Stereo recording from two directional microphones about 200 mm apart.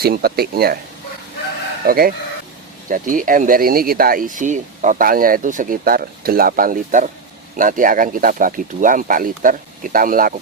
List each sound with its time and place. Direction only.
0.0 s speech: 50° right (ahead or behind)
1.8 s speech: 45° right (ahead or behind)